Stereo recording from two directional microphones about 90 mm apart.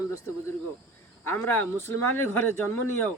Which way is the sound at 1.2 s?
25° left (ahead or behind).